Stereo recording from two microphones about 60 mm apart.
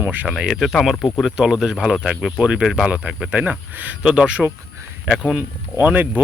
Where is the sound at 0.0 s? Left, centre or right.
Right.